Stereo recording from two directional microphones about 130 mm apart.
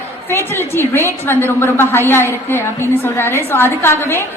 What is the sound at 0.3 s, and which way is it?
A woman's voice, 20° left (ahead or behind).